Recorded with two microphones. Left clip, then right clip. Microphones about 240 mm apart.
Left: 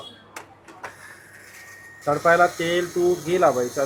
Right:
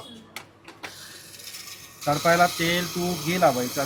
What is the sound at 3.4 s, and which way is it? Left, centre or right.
Speech, right.